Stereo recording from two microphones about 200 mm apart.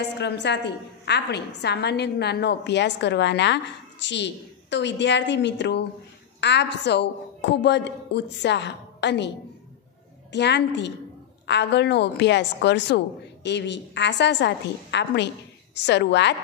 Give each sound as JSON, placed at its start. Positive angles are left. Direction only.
{"t": 0.0, "sound": "a woman's voice", "side_deg": 60}
{"t": 10.3, "sound": "a woman's voice", "side_deg": 60}